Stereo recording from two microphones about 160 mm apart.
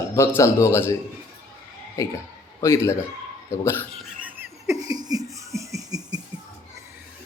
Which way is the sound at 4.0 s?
5° right (ahead or behind).